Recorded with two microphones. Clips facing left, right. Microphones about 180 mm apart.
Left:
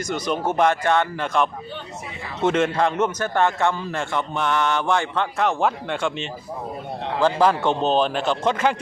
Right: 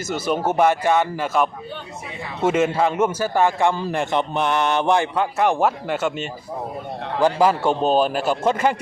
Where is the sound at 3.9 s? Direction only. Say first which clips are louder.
Right 4 dB; 20° right (ahead or behind).